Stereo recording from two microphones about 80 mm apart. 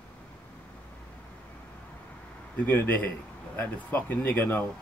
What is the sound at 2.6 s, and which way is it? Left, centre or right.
Speech, left.